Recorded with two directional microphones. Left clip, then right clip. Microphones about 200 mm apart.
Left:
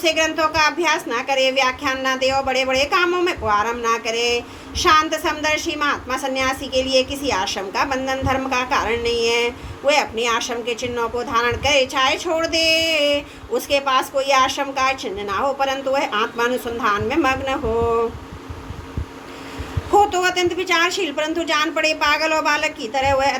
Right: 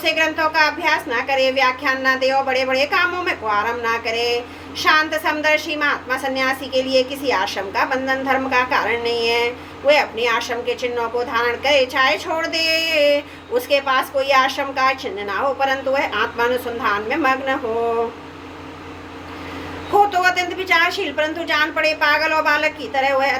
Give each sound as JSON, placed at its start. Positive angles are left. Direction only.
{"t": 0.0, "sound": "a woman's voice", "side_deg": 55}
{"t": 20.1, "sound": "a woman's voice", "side_deg": 55}